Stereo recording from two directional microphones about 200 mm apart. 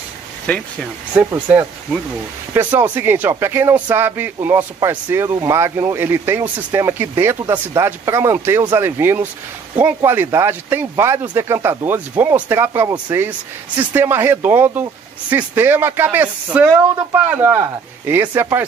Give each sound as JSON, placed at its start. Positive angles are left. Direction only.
{"t": 0.5, "sound": "speech", "side_deg": 5}
{"t": 1.1, "sound": "speech", "side_deg": -10}